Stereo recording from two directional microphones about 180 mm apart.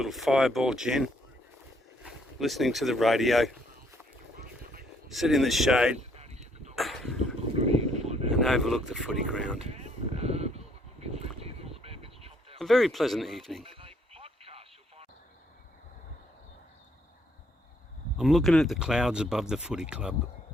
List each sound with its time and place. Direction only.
0.0 s speech: centre (ahead or behind)
2.4 s speech: centre (ahead or behind)
5.0 s speech: centre (ahead or behind)
6.0 s a sound: 35° right (ahead or behind)
6.7 s a sound: centre (ahead or behind)
7.5 s vehicle: 35° right (ahead or behind)
8.4 s speech: centre (ahead or behind)
9.6 s a sound: 35° right (ahead or behind)
12.5 s speech: centre (ahead or behind)
13.6 s radio: 30° right (ahead or behind)
18.2 s speech: centre (ahead or behind)